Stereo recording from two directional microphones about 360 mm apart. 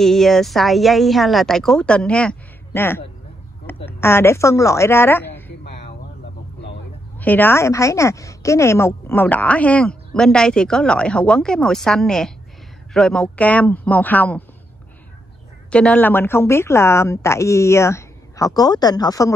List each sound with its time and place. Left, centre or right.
0.0 s a woman's voice: centre
7.2 s a woman's voice: centre
15.7 s speech: centre